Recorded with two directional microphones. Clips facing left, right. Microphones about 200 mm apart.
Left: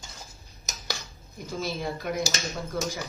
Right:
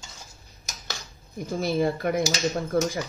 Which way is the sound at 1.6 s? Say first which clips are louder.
Right 8 dB; 55° right (ahead or behind).